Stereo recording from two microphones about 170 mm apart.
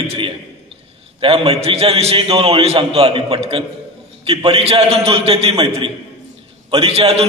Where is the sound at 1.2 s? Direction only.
35° right (ahead or behind).